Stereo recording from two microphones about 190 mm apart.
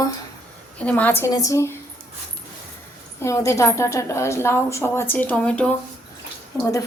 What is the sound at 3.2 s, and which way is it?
A woman's voice, 15° left (ahead or behind).